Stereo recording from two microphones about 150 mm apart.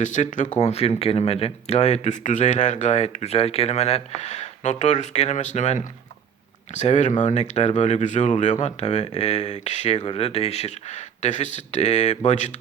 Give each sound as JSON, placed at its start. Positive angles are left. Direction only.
{"t": 0.0, "sound": "speech", "side_deg": 55}